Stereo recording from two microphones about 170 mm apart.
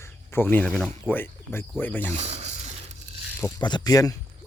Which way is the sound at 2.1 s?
40° right (ahead or behind).